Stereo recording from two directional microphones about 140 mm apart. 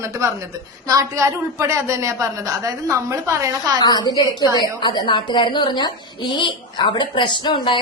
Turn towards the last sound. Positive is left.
turn(degrees=35)  # may be behind; listen again after turning